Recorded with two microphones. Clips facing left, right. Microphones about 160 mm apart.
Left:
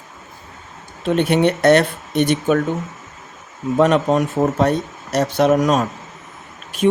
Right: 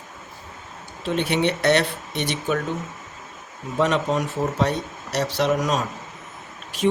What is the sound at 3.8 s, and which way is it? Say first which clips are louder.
A woman's voice: left 6 dB; 55° left (ahead or behind).